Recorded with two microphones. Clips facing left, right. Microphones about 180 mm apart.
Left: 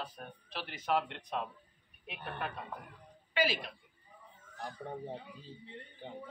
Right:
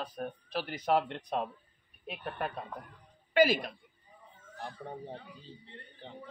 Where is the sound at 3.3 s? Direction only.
45° right (ahead or behind).